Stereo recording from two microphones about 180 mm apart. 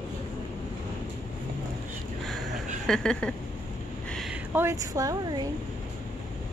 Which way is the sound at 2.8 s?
5° left (ahead or behind).